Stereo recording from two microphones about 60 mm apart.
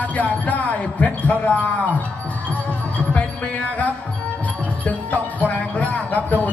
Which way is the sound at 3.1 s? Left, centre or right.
Left.